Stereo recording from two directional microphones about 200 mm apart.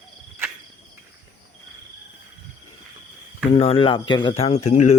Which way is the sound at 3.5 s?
30° left (ahead or behind).